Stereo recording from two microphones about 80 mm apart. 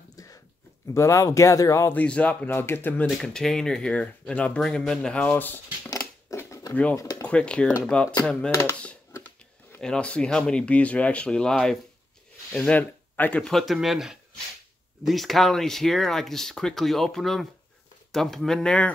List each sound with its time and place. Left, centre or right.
0.1 s a sound: left
0.9 s speech: left
1.9 s speech: centre
3.1 s speech: centre; by 5.6 s left
5.9 s a sound: left
6.7 s speech: centre
7.0 s a sound: left
7.2 s speech: centre
9.8 s speech: centre
12.5 s speech: centre
13.4 s speech: centre